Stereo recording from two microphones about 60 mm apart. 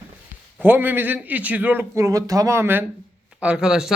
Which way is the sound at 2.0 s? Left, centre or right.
Right.